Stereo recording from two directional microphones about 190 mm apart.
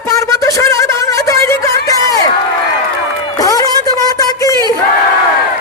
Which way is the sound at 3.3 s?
20° left (ahead or behind).